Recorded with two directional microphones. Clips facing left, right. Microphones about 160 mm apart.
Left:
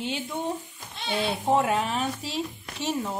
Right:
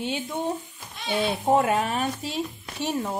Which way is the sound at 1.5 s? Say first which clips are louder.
Right 2 dB; 50° right (ahead or behind).